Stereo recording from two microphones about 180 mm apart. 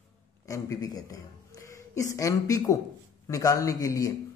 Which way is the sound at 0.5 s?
20° left (ahead or behind).